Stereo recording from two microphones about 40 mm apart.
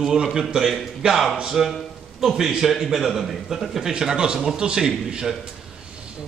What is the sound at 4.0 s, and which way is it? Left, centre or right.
A man's voice, centre.